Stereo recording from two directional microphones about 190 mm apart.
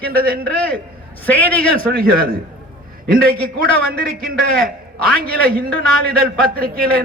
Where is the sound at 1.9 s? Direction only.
50° right (ahead or behind).